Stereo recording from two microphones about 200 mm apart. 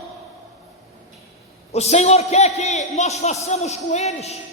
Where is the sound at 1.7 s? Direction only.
35° left (ahead or behind).